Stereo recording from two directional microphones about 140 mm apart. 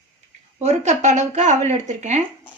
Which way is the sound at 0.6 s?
55° right (ahead or behind).